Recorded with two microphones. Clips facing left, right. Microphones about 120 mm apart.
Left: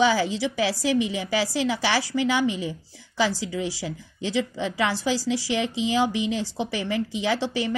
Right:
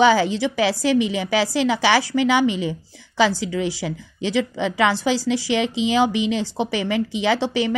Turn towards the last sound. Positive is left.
turn(degrees=-70)  # may be behind; listen again after turning